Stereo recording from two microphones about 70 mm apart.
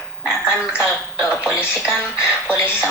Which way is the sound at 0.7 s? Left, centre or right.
Centre.